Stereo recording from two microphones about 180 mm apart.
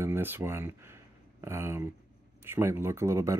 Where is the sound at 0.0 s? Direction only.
10° right (ahead or behind).